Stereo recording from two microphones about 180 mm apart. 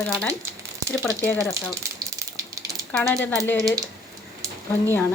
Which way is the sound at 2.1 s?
20° right (ahead or behind).